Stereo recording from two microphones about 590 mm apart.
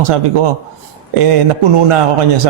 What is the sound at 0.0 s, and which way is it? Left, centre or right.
Speech, right.